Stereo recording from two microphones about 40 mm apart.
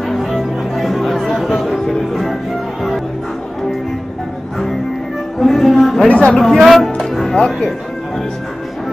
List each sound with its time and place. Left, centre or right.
0.1 s music: centre
1.1 s chatter: centre
5.4 s music: centre
6.0 s a sound: left
6.3 s speech: centre
6.6 s speech: centre
7.0 s music: centre